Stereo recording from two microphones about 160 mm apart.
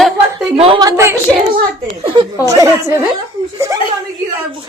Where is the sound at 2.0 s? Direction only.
30° right (ahead or behind).